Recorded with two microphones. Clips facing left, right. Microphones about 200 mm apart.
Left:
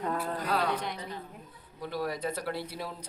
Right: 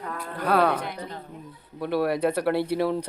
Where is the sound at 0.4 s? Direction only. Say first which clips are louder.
Right 10 dB; 60° right (ahead or behind).